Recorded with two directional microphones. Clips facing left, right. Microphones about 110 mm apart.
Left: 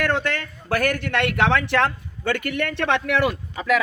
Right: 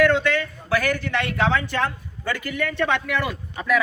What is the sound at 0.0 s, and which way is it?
A man's voice, 50° left (ahead or behind).